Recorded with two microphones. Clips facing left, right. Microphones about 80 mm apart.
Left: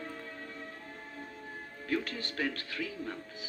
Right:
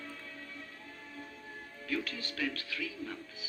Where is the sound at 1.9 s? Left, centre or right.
Left.